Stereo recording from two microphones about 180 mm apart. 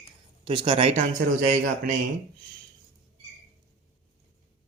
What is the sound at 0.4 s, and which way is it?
Speech, 30° right (ahead or behind).